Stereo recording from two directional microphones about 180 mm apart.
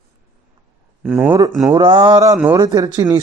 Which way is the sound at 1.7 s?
25° right (ahead or behind).